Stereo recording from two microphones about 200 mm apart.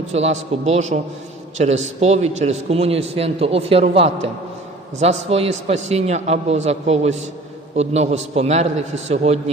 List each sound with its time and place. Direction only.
0.1 s a man's voice: 35° right (ahead or behind)